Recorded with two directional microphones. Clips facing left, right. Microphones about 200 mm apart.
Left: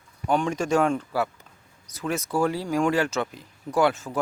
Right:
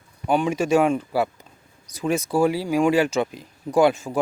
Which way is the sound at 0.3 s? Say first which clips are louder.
Right 3 dB; 5° right (ahead or behind).